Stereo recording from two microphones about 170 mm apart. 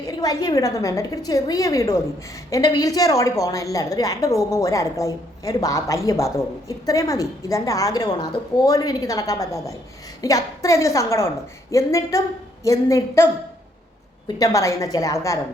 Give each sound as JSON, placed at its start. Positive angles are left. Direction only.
{"t": 0.0, "sound": "a woman's voice", "side_deg": 20}
{"t": 14.3, "sound": "a woman's voice", "side_deg": 20}